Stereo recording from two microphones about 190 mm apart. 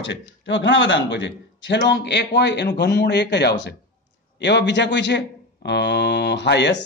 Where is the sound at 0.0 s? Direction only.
70° left (ahead or behind).